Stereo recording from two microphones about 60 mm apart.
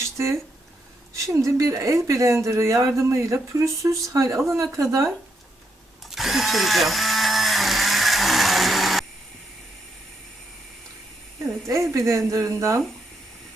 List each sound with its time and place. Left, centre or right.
0.0 s a sound: right
1.1 s speech: right
6.1 s drill: centre
11.9 s speech: right